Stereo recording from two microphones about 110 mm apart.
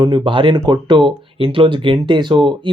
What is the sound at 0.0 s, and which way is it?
Speech, 45° right (ahead or behind).